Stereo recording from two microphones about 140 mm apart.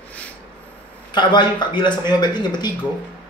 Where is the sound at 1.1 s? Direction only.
30° left (ahead or behind).